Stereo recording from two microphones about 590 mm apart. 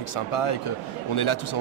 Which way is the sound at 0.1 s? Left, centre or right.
Left.